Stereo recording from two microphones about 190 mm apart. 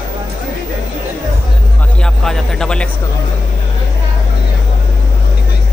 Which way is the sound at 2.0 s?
5° left (ahead or behind).